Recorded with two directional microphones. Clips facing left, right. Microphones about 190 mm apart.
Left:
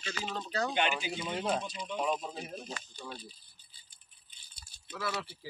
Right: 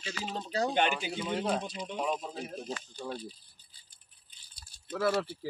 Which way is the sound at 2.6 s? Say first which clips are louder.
Right 5 dB; 35° right (ahead or behind).